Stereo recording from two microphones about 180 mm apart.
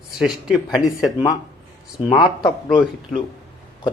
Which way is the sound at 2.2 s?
25° left (ahead or behind).